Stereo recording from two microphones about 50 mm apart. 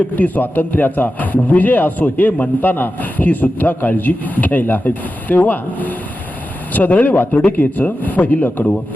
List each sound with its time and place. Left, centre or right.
0.2 s a man's voice: left